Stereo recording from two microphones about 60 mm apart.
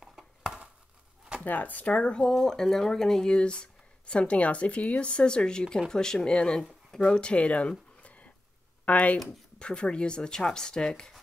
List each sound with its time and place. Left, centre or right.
0.0 s a sound: centre
1.4 s speech: left
8.8 s speech: left